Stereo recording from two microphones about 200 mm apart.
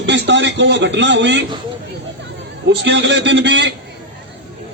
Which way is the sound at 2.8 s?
65° right (ahead or behind).